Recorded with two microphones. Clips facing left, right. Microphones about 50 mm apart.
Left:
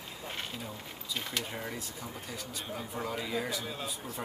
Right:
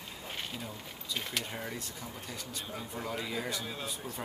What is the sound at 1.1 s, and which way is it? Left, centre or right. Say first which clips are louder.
Speech: even; centre.